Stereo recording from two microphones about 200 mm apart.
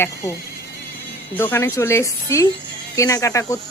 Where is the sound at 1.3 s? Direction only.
10° left (ahead or behind).